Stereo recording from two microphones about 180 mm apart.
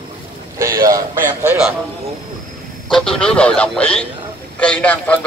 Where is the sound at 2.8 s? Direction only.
5° left (ahead or behind).